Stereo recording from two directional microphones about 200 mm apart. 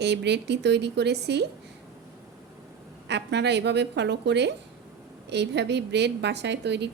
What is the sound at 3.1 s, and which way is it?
A woman's voice, 60° right (ahead or behind).